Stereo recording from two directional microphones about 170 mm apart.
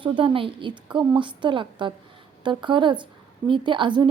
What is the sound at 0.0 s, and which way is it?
A woman's voice, 30° right (ahead or behind).